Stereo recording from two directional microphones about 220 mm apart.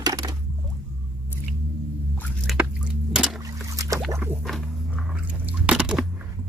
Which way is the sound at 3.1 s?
Centre (ahead or behind).